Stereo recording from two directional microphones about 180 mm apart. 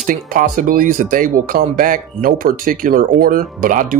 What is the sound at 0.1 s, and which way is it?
Speech, 50° right (ahead or behind).